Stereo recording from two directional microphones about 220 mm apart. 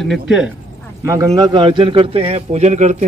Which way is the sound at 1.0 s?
15° right (ahead or behind).